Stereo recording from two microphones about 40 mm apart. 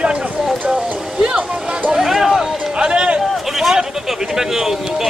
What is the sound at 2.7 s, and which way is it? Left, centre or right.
Run, right.